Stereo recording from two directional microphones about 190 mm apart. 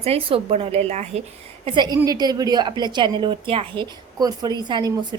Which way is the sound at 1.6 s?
25° right (ahead or behind).